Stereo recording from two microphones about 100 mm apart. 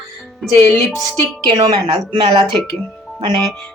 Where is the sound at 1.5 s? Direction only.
45° right (ahead or behind).